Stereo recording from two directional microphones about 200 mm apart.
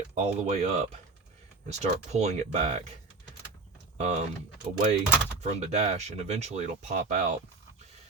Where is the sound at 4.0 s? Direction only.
35° right (ahead or behind).